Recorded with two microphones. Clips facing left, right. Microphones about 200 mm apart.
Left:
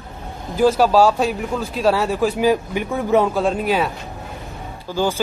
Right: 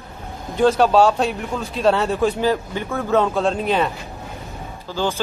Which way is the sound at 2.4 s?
15° left (ahead or behind).